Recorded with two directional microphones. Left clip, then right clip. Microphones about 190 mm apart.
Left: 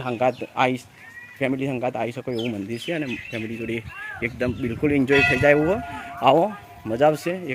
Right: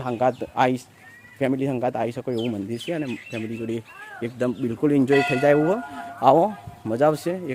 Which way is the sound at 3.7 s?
15° right (ahead or behind).